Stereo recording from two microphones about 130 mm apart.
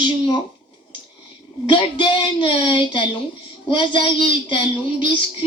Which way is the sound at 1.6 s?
40° left (ahead or behind).